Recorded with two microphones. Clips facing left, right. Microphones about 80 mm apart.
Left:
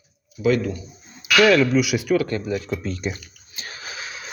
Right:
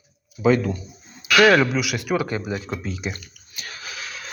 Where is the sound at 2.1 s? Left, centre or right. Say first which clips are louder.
Left 1 dB; centre.